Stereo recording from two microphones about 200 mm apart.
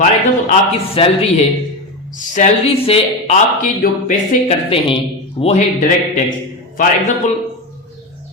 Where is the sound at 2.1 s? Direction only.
35° left (ahead or behind).